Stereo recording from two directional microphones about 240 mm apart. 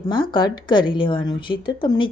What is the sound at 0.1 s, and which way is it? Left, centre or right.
A woman's voice, centre.